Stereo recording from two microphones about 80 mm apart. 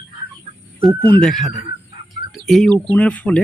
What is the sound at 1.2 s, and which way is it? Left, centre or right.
Speech, centre.